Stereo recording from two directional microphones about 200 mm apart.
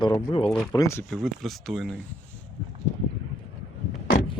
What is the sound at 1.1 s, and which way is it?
Speech, centre (ahead or behind).